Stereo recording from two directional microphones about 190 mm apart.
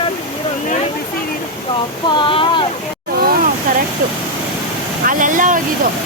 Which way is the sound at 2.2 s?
25° left (ahead or behind).